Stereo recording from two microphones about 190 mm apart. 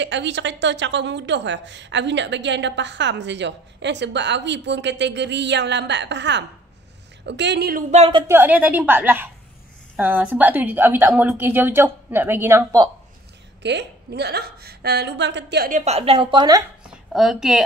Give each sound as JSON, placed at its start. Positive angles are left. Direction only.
{"t": 0.0, "sound": "a woman's voice", "side_deg": -70}
{"t": 7.9, "sound": "a woman's voice", "side_deg": -30}
{"t": 8.3, "sound": "a woman's voice", "side_deg": -10}
{"t": 13.6, "sound": "a woman's voice", "side_deg": -65}
{"t": 15.8, "sound": "a woman's voice", "side_deg": -30}
{"t": 17.1, "sound": "a woman's voice", "side_deg": 0}